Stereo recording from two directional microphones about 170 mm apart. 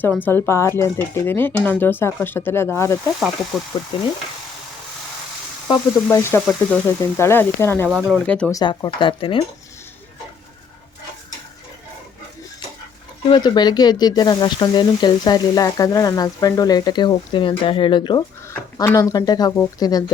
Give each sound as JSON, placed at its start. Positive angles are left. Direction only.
{"t": 0.0, "sound": "speech", "side_deg": 10}
{"t": 5.6, "sound": "speech", "side_deg": 20}
{"t": 6.4, "sound": "frying", "side_deg": 0}
{"t": 6.8, "sound": "speech", "side_deg": 15}
{"t": 7.9, "sound": "frying", "side_deg": -5}
{"t": 8.2, "sound": "speech", "side_deg": 10}
{"t": 8.5, "sound": "speech", "side_deg": 25}
{"t": 13.2, "sound": "speech", "side_deg": 30}
{"t": 18.4, "sound": "speech", "side_deg": 15}